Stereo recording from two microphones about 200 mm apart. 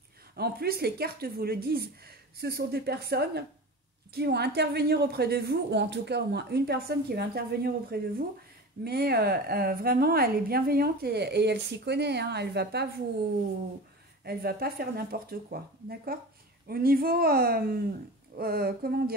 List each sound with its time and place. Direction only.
0.4 s a woman's voice: 50° right (ahead or behind)
14.2 s a woman's voice: 50° right (ahead or behind)